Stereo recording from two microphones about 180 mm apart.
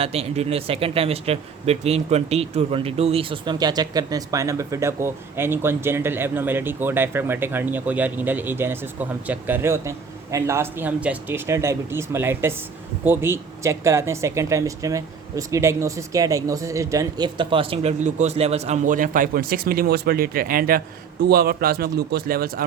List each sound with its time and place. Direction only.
0.0 s a man's voice: 35° right (ahead or behind); by 22.6 s 55° right (ahead or behind)